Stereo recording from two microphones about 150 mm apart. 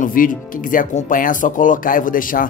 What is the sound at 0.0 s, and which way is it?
Speech, 65° left (ahead or behind).